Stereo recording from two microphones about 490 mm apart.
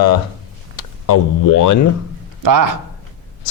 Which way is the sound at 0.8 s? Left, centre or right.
Left.